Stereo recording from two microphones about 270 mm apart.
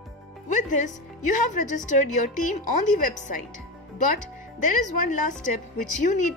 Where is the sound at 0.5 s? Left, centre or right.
Left.